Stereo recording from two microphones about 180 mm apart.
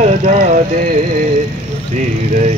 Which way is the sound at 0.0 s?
50° right (ahead or behind).